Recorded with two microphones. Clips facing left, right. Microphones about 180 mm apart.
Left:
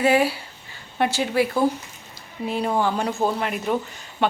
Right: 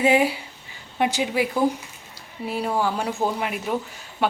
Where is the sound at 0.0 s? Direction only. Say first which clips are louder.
Even; 20° right (ahead or behind).